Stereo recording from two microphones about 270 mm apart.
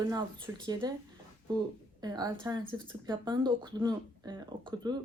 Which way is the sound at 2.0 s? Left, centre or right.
Centre.